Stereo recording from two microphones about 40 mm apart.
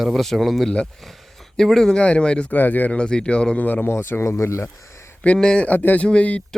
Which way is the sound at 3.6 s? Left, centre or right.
Left.